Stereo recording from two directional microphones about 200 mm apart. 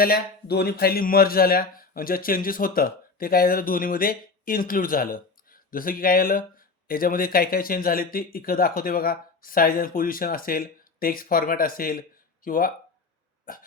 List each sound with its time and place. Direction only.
0.0 s speech: 50° left (ahead or behind)
13.4 s burping: 45° left (ahead or behind)